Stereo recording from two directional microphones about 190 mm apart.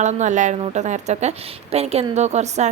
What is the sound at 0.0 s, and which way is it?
A woman's voice, 40° right (ahead or behind).